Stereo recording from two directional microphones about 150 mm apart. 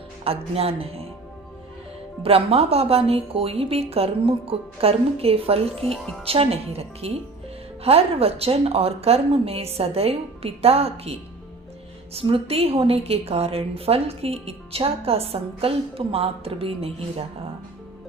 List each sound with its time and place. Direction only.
0.3 s a woman's voice: 40° right (ahead or behind)
2.2 s a woman's voice: 40° right (ahead or behind)
5.8 s speech: centre (ahead or behind)
6.2 s a woman's voice: 40° right (ahead or behind)